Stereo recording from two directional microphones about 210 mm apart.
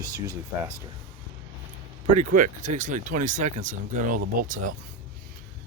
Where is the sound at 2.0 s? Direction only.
35° right (ahead or behind).